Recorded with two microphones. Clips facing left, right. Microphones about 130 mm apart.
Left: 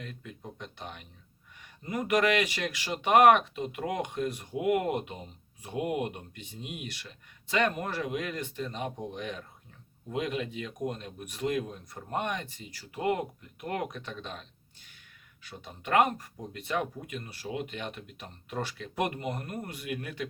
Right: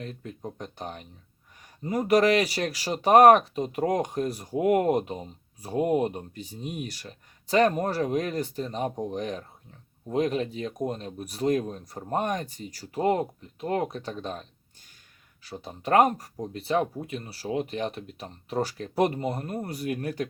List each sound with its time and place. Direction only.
0.0 s speech: 35° right (ahead or behind)
15.4 s speech: 35° right (ahead or behind)